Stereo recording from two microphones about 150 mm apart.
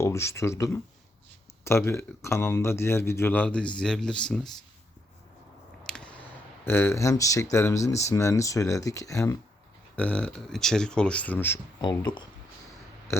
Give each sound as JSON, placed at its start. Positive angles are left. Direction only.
{"t": 0.0, "sound": "speech", "side_deg": 20}
{"t": 5.8, "sound": "a sound", "side_deg": 5}
{"t": 6.7, "sound": "speech", "side_deg": 15}
{"t": 9.9, "sound": "speech", "side_deg": 10}
{"t": 11.8, "sound": "speech", "side_deg": 30}
{"t": 13.1, "sound": "burping", "side_deg": 15}